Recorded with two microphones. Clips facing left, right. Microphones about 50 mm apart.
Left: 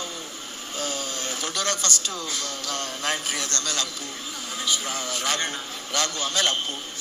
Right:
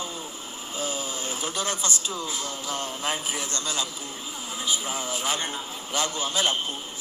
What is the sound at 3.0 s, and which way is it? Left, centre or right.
Speech, left.